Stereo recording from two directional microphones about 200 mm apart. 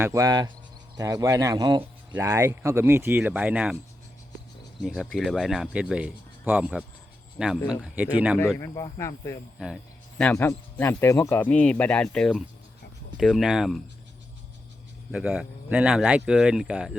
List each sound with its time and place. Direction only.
0.0 s speech: 15° right (ahead or behind)
4.8 s speech: 5° right (ahead or behind)
8.5 s speech: 15° left (ahead or behind)
9.6 s speech: centre (ahead or behind)
15.1 s speech: 5° right (ahead or behind)